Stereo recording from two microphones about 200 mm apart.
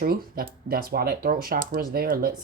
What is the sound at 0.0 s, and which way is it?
Speech, 50° right (ahead or behind).